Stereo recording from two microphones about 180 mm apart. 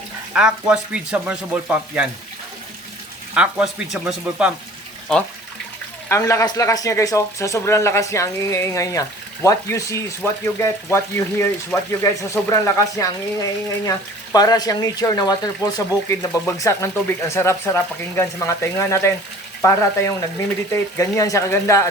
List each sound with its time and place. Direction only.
0.3 s speech: 5° right (ahead or behind)
3.3 s speech: 5° right (ahead or behind)
6.1 s speech: 15° left (ahead or behind)